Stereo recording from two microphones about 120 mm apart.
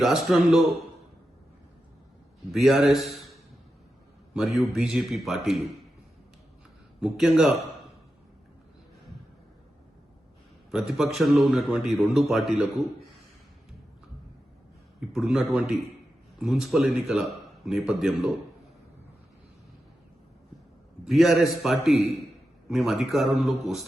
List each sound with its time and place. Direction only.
0.0 s a man's voice: centre (ahead or behind)
2.5 s a man's voice: centre (ahead or behind)
4.4 s a man's voice: centre (ahead or behind)
7.0 s a man's voice: 5° right (ahead or behind)
10.7 s a man's voice: 5° right (ahead or behind)
15.1 s a man's voice: 5° right (ahead or behind)
21.0 s a man's voice: centre (ahead or behind)